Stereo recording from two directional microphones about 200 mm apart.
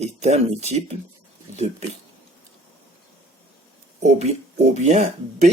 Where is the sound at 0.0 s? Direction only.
35° right (ahead or behind).